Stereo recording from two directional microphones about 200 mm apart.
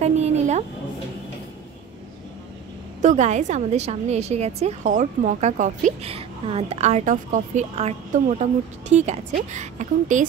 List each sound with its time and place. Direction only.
0.0 s music: 35° right (ahead or behind)
3.0 s a woman's voice: 40° right (ahead or behind)